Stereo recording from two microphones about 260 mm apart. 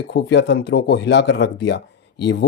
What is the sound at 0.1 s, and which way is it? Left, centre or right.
Speech, left.